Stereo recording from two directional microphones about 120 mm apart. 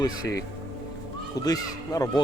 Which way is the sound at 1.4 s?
30° left (ahead or behind).